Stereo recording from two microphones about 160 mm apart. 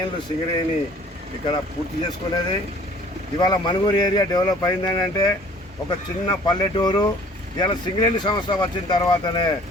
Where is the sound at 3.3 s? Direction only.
30° left (ahead or behind).